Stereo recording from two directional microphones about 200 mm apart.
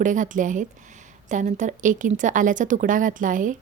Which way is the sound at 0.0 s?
40° right (ahead or behind).